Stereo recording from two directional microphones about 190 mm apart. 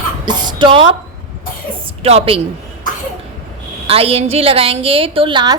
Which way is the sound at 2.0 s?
30° right (ahead or behind).